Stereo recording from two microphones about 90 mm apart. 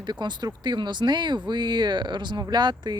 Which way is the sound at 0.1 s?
55° right (ahead or behind).